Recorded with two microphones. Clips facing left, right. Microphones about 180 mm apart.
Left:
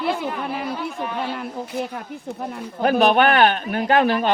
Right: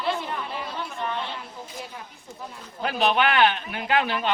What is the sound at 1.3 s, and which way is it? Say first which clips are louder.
Speech: left 11 dB; 65° left (ahead or behind).